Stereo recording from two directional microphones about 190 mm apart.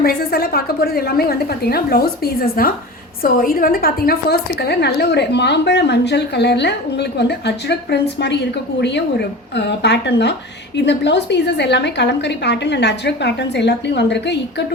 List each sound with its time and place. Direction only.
0.0 s a woman's voice: 55° left (ahead or behind)